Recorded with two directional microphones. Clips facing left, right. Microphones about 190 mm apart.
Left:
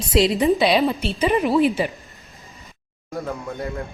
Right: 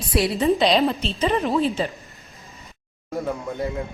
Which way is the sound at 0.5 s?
5° left (ahead or behind).